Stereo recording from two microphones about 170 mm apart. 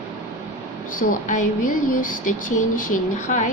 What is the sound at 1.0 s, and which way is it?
A woman's voice, 50° left (ahead or behind).